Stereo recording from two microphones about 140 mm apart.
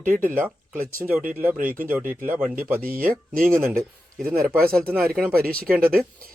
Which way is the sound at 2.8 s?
90° right.